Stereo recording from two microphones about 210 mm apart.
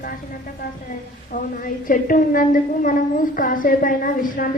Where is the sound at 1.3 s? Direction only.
40° left (ahead or behind).